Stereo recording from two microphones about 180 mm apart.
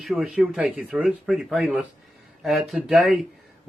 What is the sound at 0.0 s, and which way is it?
Speech, centre (ahead or behind).